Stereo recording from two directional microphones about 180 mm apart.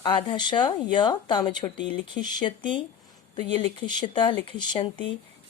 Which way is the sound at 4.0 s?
25° left (ahead or behind).